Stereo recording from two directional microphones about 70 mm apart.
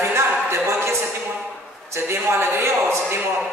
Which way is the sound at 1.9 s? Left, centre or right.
Right.